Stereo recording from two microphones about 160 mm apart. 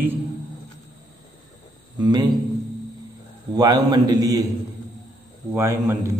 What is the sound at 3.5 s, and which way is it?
Speech, 25° right (ahead or behind).